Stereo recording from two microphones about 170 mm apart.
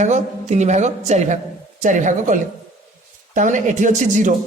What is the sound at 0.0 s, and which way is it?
Speech, 45° right (ahead or behind).